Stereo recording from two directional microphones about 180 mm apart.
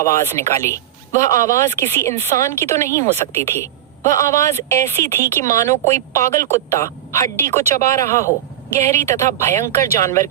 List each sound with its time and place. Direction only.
0.0 s a woman's voice: 15° left (ahead or behind)